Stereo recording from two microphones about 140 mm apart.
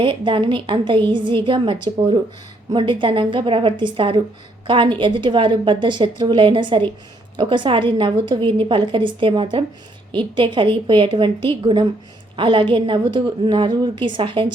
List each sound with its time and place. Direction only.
0.0 s a woman's voice: 35° right (ahead or behind)